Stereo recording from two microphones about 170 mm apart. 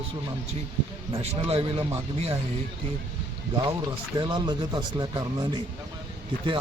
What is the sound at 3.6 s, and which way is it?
Speech, 25° right (ahead or behind).